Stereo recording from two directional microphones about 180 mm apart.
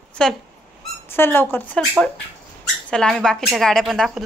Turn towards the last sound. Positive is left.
turn(degrees=0)  # may be behind; listen again after turning